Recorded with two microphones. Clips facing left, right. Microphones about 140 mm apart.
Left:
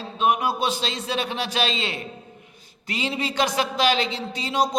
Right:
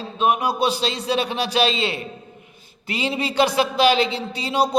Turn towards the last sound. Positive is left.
turn(degrees=-10)  # may be behind; listen again after turning